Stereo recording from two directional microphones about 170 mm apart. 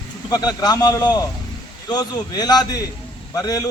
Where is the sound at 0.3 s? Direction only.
20° left (ahead or behind).